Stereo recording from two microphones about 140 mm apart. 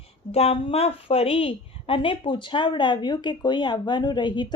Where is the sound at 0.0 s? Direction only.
45° left (ahead or behind).